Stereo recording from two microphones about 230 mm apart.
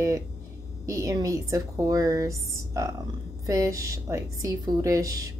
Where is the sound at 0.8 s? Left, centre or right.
Centre.